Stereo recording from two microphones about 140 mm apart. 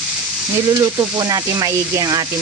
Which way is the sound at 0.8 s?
25° right (ahead or behind).